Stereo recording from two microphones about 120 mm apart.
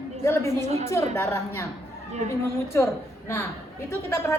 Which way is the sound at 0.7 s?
65° right (ahead or behind).